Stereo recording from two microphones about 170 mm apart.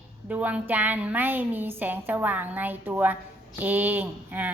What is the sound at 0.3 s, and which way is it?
A woman's voice, 10° right (ahead or behind).